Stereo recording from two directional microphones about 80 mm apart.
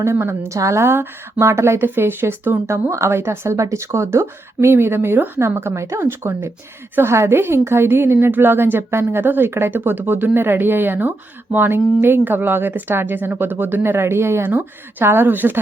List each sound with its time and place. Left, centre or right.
0.0 s a woman's voice: right